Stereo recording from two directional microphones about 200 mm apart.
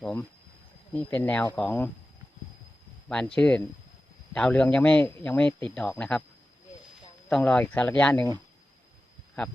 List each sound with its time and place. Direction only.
0.0 s a man's voice: 10° left (ahead or behind)
3.1 s a man's voice: 5° left (ahead or behind)
7.3 s a man's voice: 5° left (ahead or behind)
9.4 s speech: 5° left (ahead or behind)